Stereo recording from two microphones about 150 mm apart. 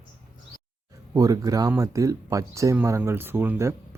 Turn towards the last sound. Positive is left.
turn(degrees=-15)  # may be behind; listen again after turning